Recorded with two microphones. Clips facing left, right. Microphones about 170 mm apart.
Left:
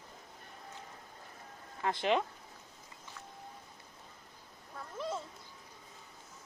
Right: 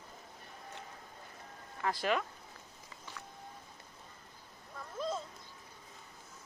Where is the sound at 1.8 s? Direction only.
25° left (ahead or behind).